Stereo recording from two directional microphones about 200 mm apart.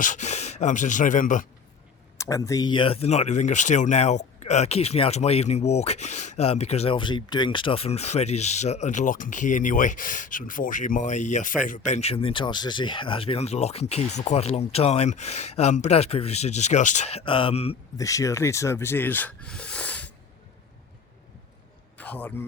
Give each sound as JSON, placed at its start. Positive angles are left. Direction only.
{"t": 0.0, "sound": "speech", "side_deg": 35}
{"t": 2.1, "sound": "speech", "side_deg": 15}
{"t": 17.9, "sound": "speech", "side_deg": 15}
{"t": 21.9, "sound": "a man's voice", "side_deg": 5}